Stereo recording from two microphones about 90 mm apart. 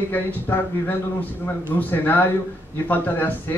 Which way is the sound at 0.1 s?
20° left (ahead or behind).